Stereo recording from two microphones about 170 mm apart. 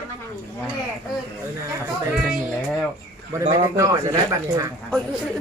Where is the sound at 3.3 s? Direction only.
20° right (ahead or behind).